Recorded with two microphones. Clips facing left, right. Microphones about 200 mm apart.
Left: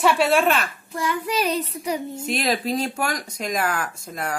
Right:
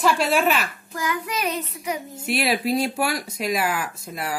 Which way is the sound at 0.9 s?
30° left (ahead or behind).